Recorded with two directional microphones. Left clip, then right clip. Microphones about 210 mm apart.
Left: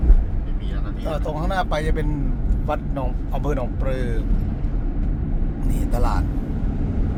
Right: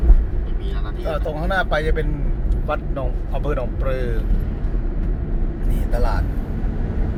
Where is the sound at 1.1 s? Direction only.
20° left (ahead or behind).